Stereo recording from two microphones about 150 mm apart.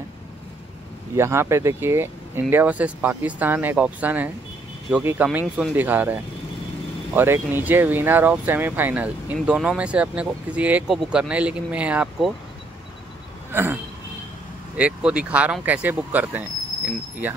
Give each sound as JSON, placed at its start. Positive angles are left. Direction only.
{"t": 1.1, "sound": "speech", "side_deg": -20}
{"t": 7.2, "sound": "speech", "side_deg": -15}
{"t": 13.5, "sound": "speech", "side_deg": -15}
{"t": 14.8, "sound": "speech", "side_deg": -5}